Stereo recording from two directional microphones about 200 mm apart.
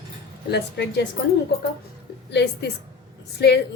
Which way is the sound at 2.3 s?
60° left (ahead or behind).